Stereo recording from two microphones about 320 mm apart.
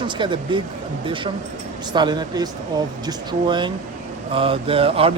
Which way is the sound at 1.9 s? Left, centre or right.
Centre.